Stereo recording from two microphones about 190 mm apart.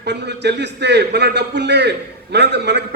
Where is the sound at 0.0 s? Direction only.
65° right (ahead or behind).